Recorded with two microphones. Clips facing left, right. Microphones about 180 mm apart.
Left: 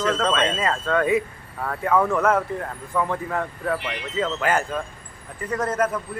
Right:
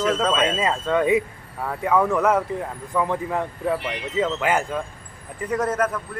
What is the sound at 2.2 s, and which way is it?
Speech, 15° right (ahead or behind).